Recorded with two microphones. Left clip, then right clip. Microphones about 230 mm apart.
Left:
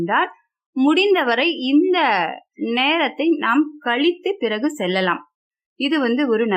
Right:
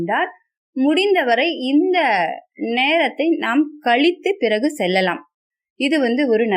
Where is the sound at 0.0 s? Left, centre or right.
Centre.